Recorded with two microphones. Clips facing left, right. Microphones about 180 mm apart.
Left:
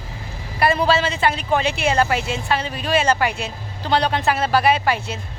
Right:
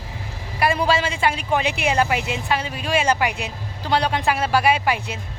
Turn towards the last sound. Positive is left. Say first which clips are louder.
# left 1 dB
turn(degrees=-10)  # may be behind; listen again after turning